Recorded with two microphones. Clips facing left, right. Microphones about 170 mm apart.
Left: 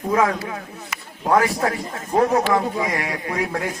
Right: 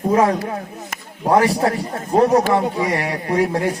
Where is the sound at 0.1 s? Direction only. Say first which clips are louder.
Right 3 dB; 35° right (ahead or behind).